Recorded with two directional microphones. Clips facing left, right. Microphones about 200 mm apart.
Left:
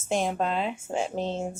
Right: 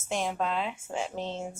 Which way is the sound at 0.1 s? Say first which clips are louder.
Left 4 dB; 40° left (ahead or behind).